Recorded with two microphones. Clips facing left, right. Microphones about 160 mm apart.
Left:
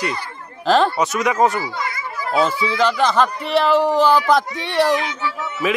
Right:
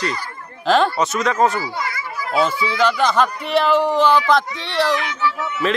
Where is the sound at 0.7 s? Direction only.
Centre (ahead or behind).